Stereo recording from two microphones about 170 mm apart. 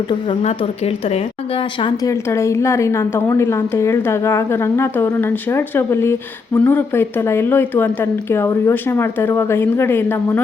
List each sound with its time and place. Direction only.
0.4 s a woman's voice: 35° left (ahead or behind)
2.0 s a woman's voice: 20° left (ahead or behind)